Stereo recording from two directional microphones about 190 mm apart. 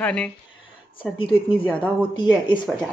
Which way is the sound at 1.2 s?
30° left (ahead or behind).